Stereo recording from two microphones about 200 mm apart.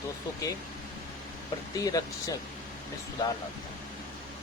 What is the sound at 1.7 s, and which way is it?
Speech, 20° left (ahead or behind).